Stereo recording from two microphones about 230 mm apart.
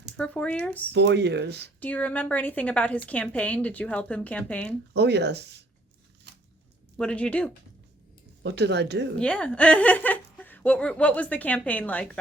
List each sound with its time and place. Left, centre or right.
0.2 s speech: centre
0.9 s speech: right
1.8 s speech: centre
4.9 s speech: right
6.9 s speech: centre
8.4 s speech: right
9.1 s speech: centre